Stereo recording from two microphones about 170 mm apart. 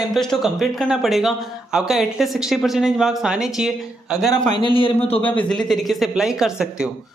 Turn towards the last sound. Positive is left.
turn(degrees=-5)  # may be behind; listen again after turning